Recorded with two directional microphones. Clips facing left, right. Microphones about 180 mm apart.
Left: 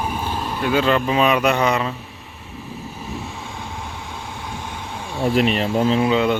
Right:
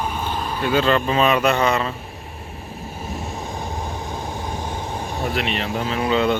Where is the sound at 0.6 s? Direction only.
10° left (ahead or behind).